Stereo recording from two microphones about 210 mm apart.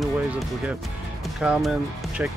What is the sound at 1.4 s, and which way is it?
Speech, 5° right (ahead or behind).